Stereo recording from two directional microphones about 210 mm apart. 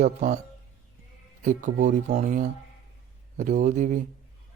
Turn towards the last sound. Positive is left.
turn(degrees=-35)  # may be behind; listen again after turning